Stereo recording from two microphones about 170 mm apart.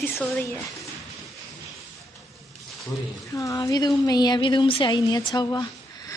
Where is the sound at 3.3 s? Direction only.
20° left (ahead or behind).